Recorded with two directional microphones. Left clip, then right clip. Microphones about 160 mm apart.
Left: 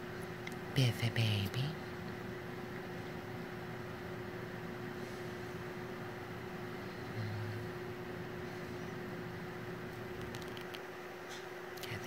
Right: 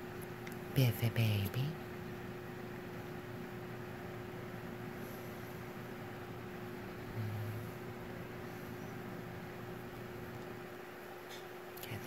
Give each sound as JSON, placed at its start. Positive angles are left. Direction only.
{"t": 0.7, "sound": "speech", "side_deg": -30}